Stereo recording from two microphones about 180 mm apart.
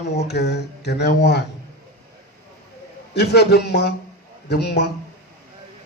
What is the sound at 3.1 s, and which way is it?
A man's voice, 65° left (ahead or behind).